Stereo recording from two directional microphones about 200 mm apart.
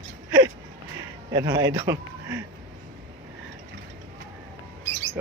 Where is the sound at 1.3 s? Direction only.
15° right (ahead or behind).